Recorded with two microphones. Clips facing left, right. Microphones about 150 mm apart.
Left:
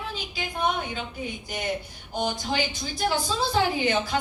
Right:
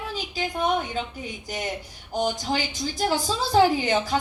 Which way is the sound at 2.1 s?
40° right (ahead or behind).